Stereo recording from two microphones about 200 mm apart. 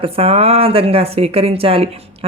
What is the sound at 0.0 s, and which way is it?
Speech, 30° right (ahead or behind).